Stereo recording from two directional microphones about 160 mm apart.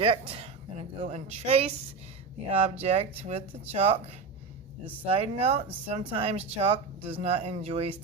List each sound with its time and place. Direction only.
0.0 s a woman's voice: 35° right (ahead or behind)